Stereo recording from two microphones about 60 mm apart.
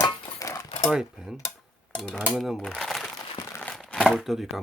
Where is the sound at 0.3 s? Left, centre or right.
Left.